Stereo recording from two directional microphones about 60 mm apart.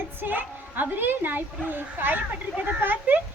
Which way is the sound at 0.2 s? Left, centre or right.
Right.